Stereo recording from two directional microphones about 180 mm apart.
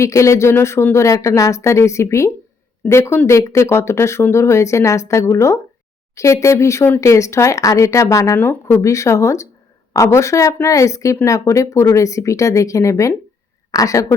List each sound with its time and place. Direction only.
0.0 s a woman's voice: 15° left (ahead or behind)